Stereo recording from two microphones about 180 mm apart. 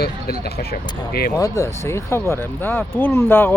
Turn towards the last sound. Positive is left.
turn(degrees=10)  # may be behind; listen again after turning